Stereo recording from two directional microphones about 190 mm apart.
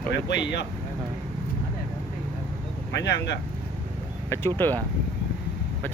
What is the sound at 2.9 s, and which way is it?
Speech, 65° left (ahead or behind).